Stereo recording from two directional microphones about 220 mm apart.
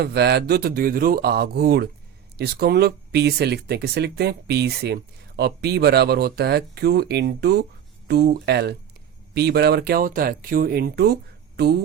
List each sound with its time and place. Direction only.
0.0 s speech: 50° right (ahead or behind)